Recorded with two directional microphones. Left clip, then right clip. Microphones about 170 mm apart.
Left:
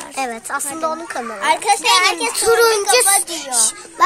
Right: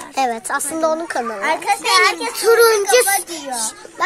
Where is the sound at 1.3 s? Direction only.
50° left (ahead or behind).